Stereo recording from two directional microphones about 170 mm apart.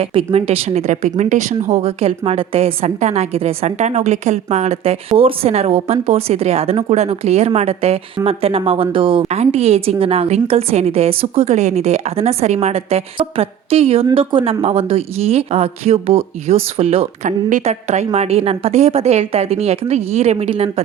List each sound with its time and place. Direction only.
0.1 s speech: 35° right (ahead or behind)